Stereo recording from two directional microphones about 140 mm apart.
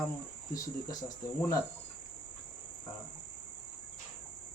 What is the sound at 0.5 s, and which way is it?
Speech, 25° left (ahead or behind).